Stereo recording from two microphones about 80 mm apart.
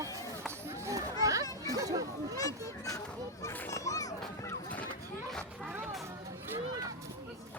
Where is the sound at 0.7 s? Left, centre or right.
Right.